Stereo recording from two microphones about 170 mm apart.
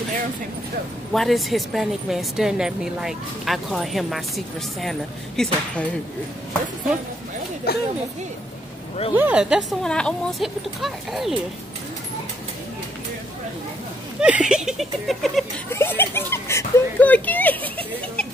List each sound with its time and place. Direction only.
1.1 s a woman's voice: centre (ahead or behind)
7.7 s speech: 70° left (ahead or behind)
9.1 s a woman's voice: 10° right (ahead or behind)
14.2 s a woman's voice: 5° right (ahead or behind)
15.7 s speech: 15° left (ahead or behind)